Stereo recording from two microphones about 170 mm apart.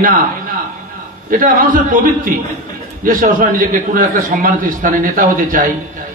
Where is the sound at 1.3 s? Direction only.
55° right (ahead or behind).